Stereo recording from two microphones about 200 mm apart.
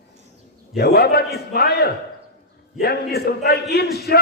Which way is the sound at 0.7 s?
50° left (ahead or behind).